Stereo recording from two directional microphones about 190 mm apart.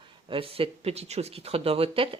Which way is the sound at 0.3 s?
30° right (ahead or behind).